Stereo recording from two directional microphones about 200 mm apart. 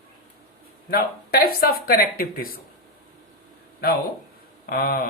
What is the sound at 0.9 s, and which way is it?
Speech, 50° left (ahead or behind).